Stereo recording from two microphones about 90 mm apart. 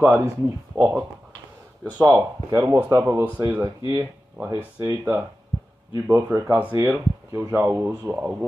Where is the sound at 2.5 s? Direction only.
35° right (ahead or behind).